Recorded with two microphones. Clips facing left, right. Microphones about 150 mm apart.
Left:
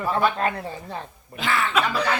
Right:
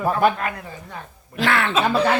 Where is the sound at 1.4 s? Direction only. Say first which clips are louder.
Right 3 dB; 65° right (ahead or behind).